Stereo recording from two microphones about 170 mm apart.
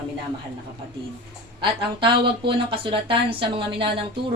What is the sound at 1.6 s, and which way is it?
Speech, 30° right (ahead or behind).